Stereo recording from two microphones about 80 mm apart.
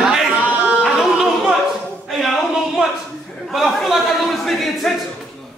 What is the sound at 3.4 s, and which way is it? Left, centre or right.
A man's voice, centre.